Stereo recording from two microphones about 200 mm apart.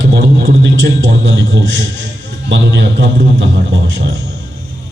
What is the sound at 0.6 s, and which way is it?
A man's voice, 70° right (ahead or behind).